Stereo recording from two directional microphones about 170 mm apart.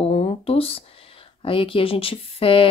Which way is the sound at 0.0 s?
35° left (ahead or behind).